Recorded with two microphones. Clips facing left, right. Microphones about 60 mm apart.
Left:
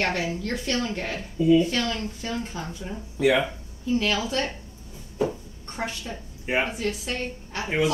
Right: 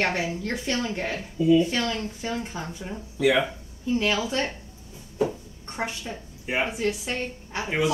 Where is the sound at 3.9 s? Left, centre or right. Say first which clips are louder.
Even; right.